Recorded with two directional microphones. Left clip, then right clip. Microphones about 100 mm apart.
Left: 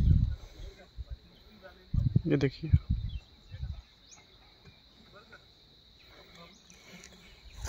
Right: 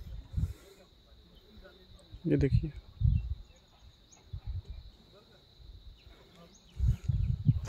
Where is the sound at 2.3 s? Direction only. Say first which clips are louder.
Even; 45° right (ahead or behind).